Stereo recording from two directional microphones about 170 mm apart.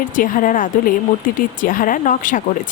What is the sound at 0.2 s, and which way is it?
Speech, 55° left (ahead or behind).